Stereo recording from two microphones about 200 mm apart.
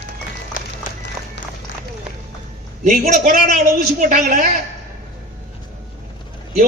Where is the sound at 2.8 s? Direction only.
40° right (ahead or behind).